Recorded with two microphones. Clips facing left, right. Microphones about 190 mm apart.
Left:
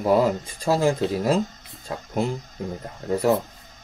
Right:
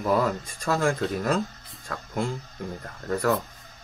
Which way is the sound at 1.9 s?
20° left (ahead or behind).